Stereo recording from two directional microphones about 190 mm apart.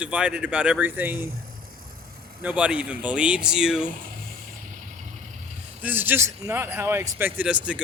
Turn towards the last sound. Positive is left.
turn(degrees=-5)  # may be behind; listen again after turning